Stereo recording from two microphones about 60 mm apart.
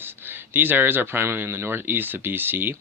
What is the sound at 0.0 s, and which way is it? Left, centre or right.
Speech, right.